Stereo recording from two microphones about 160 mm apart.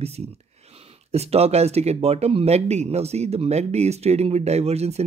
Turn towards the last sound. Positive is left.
turn(degrees=-40)  # may be behind; listen again after turning